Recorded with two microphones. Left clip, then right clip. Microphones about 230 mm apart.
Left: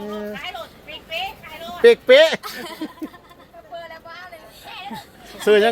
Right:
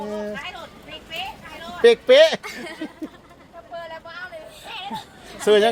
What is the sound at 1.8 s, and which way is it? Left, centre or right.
Speech, centre.